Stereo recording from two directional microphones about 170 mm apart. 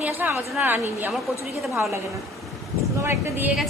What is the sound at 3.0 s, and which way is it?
Speech, 15° right (ahead or behind).